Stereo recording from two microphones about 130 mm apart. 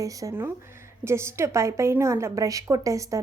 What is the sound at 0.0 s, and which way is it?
A woman's voice, 25° right (ahead or behind).